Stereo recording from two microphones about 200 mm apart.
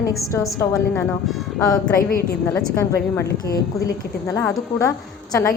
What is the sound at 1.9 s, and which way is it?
Speech, 45° left (ahead or behind).